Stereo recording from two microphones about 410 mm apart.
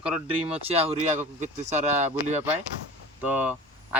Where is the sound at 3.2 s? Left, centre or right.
Centre.